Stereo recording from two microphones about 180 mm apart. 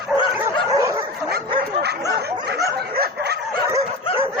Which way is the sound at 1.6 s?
65° right (ahead or behind).